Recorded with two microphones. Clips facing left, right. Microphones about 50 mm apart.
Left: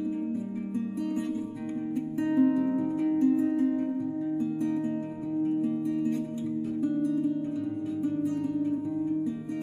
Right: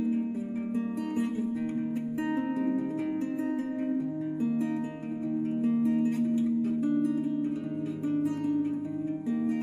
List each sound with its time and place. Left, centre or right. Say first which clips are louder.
2.1 s music: left 8 dB; centre
3.1 s music: left 7 dB; right
5.6 s music: right 2 dB; right
8.1 s music: right 5 dB; right